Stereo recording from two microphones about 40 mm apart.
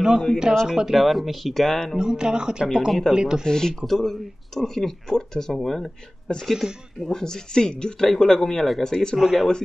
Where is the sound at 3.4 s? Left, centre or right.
Centre.